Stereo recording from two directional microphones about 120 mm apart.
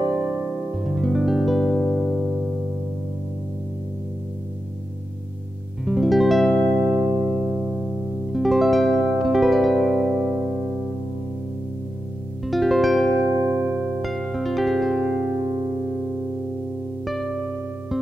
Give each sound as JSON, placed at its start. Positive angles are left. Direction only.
{"t": 0.1, "sound": "music", "side_deg": -10}
{"t": 5.9, "sound": "music", "side_deg": 0}
{"t": 7.0, "sound": "music", "side_deg": -20}
{"t": 7.3, "sound": "music", "side_deg": 0}
{"t": 8.3, "sound": "harp", "side_deg": 0}
{"t": 10.1, "sound": "music", "side_deg": -15}
{"t": 12.4, "sound": "music", "side_deg": 0}
{"t": 13.3, "sound": "music", "side_deg": -20}
{"t": 14.0, "sound": "music", "side_deg": 0}
{"t": 17.0, "sound": "music", "side_deg": 0}